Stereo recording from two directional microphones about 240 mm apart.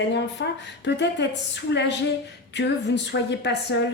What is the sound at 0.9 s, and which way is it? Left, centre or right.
A woman's voice, left.